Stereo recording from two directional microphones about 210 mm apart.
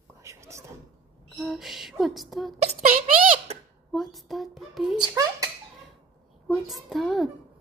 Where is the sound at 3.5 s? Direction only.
30° right (ahead or behind).